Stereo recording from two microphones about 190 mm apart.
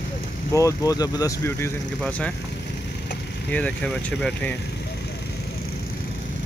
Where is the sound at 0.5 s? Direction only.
15° left (ahead or behind).